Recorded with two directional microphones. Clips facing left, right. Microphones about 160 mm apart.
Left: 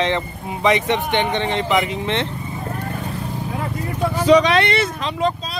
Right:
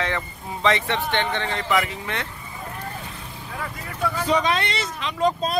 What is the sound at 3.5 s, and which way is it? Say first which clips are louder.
Vehicle: left 4 dB; 25° left (ahead or behind).